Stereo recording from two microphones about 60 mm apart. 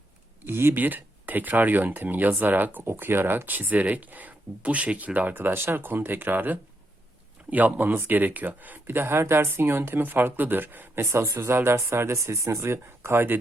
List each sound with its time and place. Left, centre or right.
0.4 s speech: right
11.3 s speech: right